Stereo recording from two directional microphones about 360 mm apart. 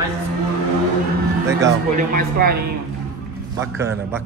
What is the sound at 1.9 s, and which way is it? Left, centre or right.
Speech, right.